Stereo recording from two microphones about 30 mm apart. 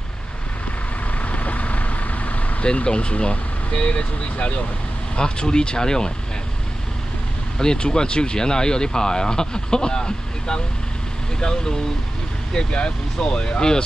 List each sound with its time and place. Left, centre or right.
1.2 s vehicle: left
2.6 s speech: left
5.1 s speech: left
7.5 s speech: left